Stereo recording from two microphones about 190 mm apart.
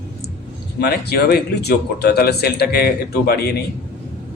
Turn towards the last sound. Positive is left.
turn(degrees=60)  # may be behind; listen again after turning